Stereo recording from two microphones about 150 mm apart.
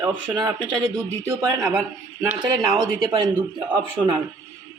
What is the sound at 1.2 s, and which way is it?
Speech, 20° right (ahead or behind).